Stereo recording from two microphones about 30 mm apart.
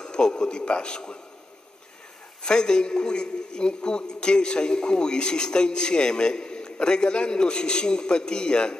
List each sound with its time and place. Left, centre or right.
0.0 s a man's voice: left
2.4 s a man's voice: left